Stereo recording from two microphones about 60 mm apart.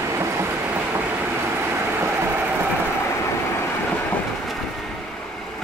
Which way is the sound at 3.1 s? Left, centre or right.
Left.